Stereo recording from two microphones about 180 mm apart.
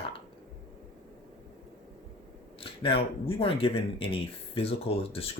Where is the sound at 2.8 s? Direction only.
30° left (ahead or behind).